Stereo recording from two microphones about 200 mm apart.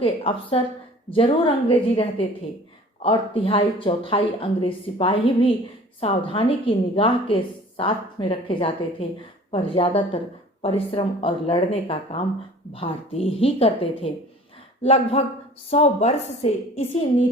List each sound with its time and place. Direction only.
0.0 s a woman's voice: 25° left (ahead or behind)